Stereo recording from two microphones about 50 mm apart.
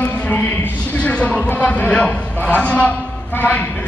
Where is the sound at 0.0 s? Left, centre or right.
Left.